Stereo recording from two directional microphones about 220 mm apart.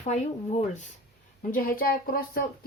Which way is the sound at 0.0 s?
30° left (ahead or behind).